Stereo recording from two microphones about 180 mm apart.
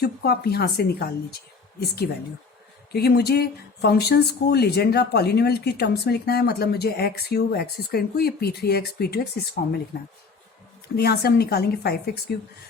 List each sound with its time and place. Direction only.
0.0 s speech: 60° left (ahead or behind)
2.9 s speech: 65° left (ahead or behind)
10.9 s speech: 60° left (ahead or behind)